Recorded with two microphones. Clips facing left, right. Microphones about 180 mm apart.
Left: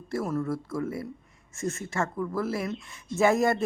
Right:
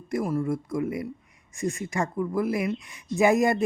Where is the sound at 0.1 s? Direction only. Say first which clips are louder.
Right 3 dB; 10° right (ahead or behind).